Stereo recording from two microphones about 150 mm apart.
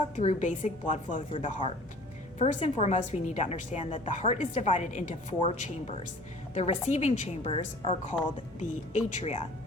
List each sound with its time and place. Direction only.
0.2 s a woman's voice: 50° left (ahead or behind)
1.3 s a woman's voice: 40° left (ahead or behind)
6.5 s a woman's voice: 45° left (ahead or behind)
8.5 s a woman's voice: 50° left (ahead or behind)